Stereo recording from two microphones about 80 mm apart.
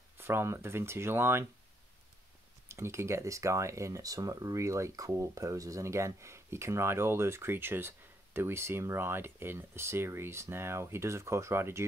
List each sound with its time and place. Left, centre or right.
0.2 s speech: right
2.7 s speech: right